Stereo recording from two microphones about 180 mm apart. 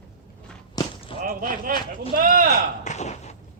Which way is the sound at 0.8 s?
30° left (ahead or behind).